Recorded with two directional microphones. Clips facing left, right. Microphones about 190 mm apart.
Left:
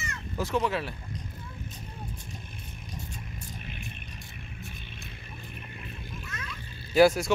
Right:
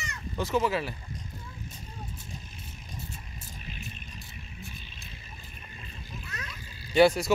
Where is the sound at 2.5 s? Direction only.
55° left (ahead or behind).